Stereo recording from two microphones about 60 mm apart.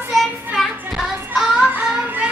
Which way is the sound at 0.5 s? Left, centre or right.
Centre.